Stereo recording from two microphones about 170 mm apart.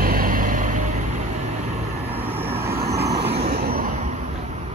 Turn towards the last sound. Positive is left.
turn(degrees=-60)  # may be behind; listen again after turning